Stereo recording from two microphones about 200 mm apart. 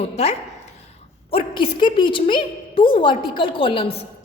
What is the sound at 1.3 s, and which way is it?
A woman's voice, 25° left (ahead or behind).